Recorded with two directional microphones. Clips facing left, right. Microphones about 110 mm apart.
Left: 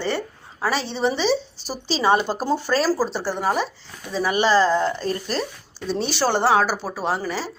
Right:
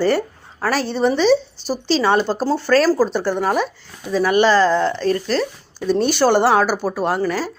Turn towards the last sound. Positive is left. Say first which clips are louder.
# right 5 dB
turn(degrees=0)  # may be behind; listen again after turning